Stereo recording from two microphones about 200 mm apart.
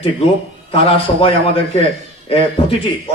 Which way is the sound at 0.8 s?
30° left (ahead or behind).